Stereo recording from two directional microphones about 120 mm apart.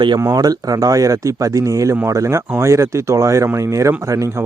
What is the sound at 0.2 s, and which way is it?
Speech, 30° right (ahead or behind).